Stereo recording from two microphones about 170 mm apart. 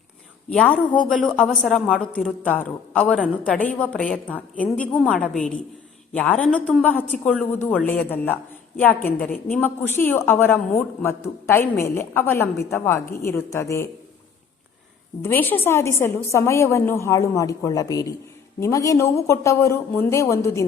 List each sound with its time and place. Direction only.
0.5 s a woman's voice: 5° left (ahead or behind)
15.2 s a woman's voice: 10° left (ahead or behind)